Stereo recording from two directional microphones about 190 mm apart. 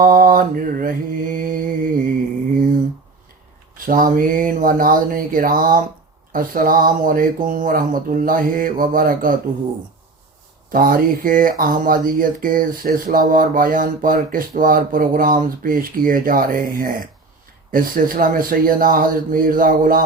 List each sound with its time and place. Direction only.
0.0 s speech: 45° right (ahead or behind)
3.8 s speech: 45° right (ahead or behind)
10.7 s speech: 50° right (ahead or behind)